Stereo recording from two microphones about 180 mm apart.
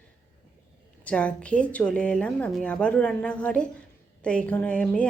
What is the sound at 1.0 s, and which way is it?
A woman's voice, 5° left (ahead or behind).